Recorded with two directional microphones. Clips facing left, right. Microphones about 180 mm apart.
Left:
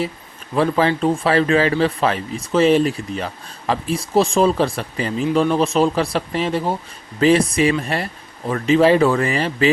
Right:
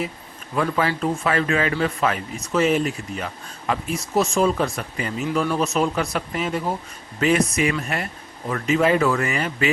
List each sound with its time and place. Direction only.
0.5 s speech: 30° left (ahead or behind)